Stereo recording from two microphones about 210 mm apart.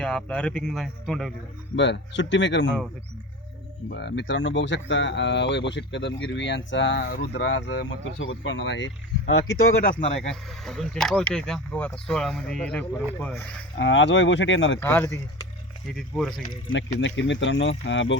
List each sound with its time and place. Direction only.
0.0 s speech: 5° left (ahead or behind)
1.7 s speech: 60° left (ahead or behind)
3.8 s speech: 55° left (ahead or behind)
9.9 s speech: 30° left (ahead or behind)
10.2 s speech: centre (ahead or behind)
13.7 s speech: 60° left (ahead or behind)
14.8 s speech: 10° left (ahead or behind)
15.9 s speech: centre (ahead or behind)
17.0 s speech: 60° left (ahead or behind)